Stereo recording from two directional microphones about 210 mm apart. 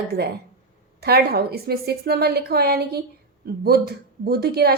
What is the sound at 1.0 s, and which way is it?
A woman's voice, 50° right (ahead or behind).